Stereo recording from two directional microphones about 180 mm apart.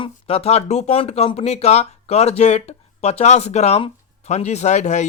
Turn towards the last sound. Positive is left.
turn(degrees=40)  # may be behind; listen again after turning